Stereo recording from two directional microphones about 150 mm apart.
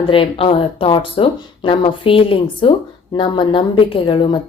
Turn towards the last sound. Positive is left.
turn(degrees=35)  # may be behind; listen again after turning